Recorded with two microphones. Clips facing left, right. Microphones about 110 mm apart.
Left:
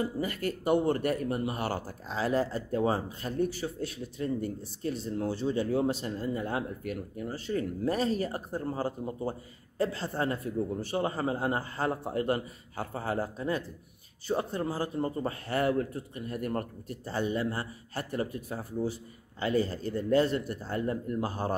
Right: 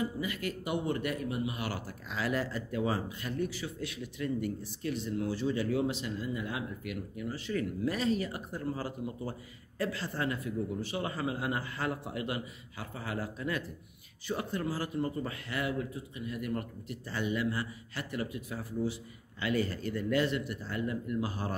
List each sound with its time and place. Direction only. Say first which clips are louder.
0.0 s speech: left 3 dB; 45° left (ahead or behind)